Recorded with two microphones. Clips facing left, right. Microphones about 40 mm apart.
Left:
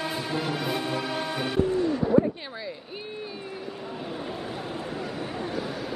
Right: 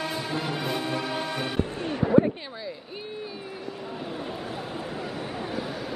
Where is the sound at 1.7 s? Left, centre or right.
Right.